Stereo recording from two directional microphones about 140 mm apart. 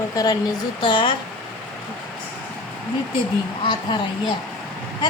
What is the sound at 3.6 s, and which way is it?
Speech, 35° left (ahead or behind).